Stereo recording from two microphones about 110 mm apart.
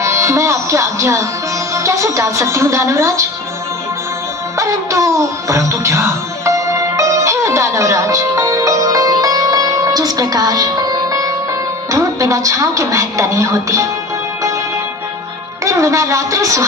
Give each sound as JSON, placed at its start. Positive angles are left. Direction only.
{"t": 0.0, "sound": "a woman's voice", "side_deg": -25}
{"t": 4.5, "sound": "music", "side_deg": -25}
{"t": 11.9, "sound": "a woman's voice", "side_deg": -30}
{"t": 15.6, "sound": "a woman's voice", "side_deg": -30}